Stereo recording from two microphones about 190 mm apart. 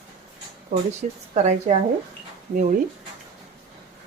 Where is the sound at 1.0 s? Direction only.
35° right (ahead or behind).